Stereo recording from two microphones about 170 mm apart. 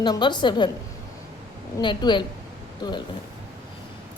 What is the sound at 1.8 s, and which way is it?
Speech, 25° left (ahead or behind).